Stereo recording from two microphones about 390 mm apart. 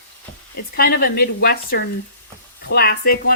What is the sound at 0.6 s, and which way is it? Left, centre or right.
Speech, left.